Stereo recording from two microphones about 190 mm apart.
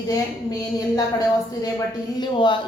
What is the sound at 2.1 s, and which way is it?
Speech, 25° left (ahead or behind).